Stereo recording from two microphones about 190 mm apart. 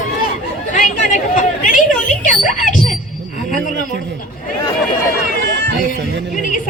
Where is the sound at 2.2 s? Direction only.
45° left (ahead or behind).